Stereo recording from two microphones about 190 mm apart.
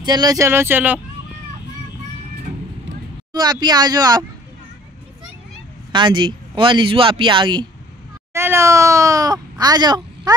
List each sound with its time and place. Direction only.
0.0 s speech: 20° right (ahead or behind)
3.3 s speech: 20° right (ahead or behind)
5.9 s speech: 25° right (ahead or behind)
8.3 s speech: 15° right (ahead or behind)